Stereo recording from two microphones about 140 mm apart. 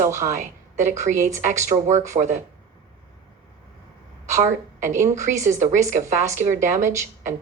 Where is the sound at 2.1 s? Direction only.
35° right (ahead or behind).